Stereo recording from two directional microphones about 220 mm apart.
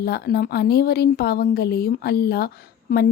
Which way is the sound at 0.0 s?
45° left (ahead or behind).